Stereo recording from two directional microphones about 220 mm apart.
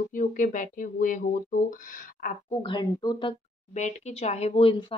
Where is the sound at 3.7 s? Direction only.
30° left (ahead or behind).